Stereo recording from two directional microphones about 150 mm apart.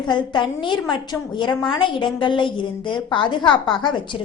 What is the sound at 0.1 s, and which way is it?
A woman's voice, 30° left (ahead or behind).